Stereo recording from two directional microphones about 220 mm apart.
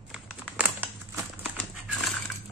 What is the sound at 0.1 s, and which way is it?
Typing, 5° right (ahead or behind).